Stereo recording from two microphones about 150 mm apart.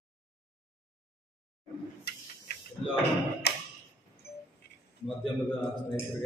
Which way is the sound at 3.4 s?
90° left.